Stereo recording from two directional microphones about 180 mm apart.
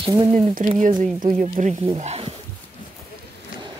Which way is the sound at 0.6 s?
45° right (ahead or behind).